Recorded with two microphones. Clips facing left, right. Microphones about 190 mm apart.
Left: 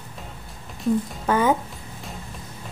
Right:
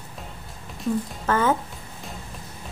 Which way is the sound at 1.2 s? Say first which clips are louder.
Left 1 dB; 10° left (ahead or behind).